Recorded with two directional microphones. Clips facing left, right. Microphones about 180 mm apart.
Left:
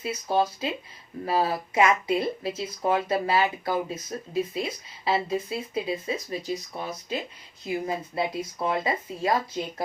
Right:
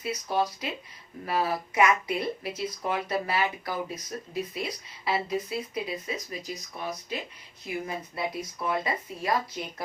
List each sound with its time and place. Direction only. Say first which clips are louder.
0.0 s speech: left 3 dB; 25° left (ahead or behind)